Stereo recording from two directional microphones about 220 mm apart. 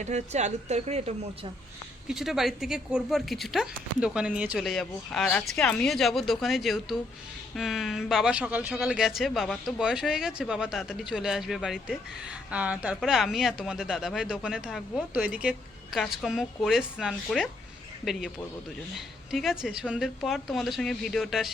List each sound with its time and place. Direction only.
0.0 s a woman's voice: 30° right (ahead or behind)
2.0 s speech: centre (ahead or behind)